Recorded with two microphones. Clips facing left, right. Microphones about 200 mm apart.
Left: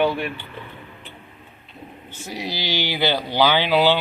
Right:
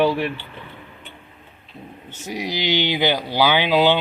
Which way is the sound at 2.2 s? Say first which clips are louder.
Right 4 dB; 15° right (ahead or behind).